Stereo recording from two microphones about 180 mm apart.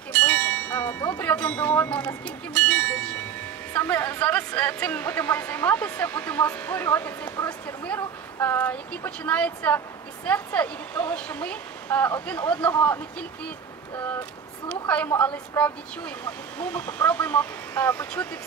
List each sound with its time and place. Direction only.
0.1 s a woman's voice: 10° left (ahead or behind)
14.7 s a woman's voice: 10° left (ahead or behind)